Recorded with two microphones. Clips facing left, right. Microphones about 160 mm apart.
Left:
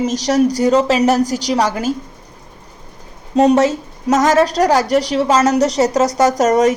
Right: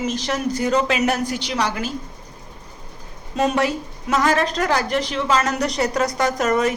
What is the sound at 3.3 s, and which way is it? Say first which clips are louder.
A woman's voice: left 8 dB; 35° left (ahead or behind).